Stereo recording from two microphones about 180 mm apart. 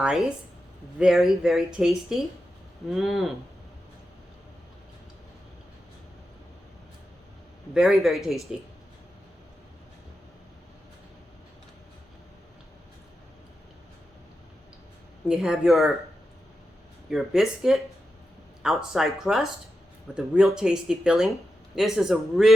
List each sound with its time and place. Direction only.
0.0 s speech: 5° right (ahead or behind)
7.7 s speech: centre (ahead or behind)
15.3 s speech: centre (ahead or behind)
17.1 s speech: centre (ahead or behind)